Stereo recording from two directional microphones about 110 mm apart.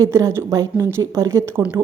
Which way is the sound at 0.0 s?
25° right (ahead or behind).